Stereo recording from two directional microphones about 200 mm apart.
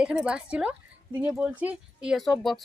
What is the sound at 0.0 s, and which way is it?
Speech, 5° right (ahead or behind).